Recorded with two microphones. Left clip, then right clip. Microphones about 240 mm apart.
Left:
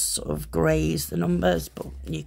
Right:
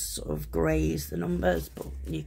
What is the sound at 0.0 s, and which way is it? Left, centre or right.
Speech, left.